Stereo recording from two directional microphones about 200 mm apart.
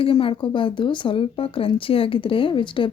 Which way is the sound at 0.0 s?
25° left (ahead or behind).